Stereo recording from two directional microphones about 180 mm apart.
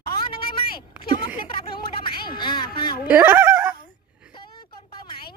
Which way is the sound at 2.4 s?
25° left (ahead or behind).